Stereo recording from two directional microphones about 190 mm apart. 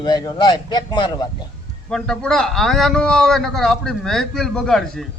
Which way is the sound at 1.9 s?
5° left (ahead or behind).